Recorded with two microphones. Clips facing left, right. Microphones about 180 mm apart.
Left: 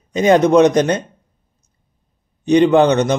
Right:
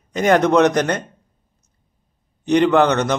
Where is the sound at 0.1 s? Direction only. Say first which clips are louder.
Left 3 dB; 20° left (ahead or behind).